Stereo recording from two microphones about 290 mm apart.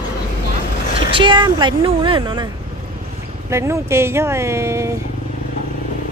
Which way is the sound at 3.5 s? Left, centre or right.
Centre.